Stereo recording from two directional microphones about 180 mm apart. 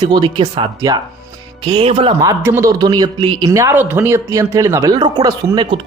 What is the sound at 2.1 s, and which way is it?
Speech, 15° right (ahead or behind).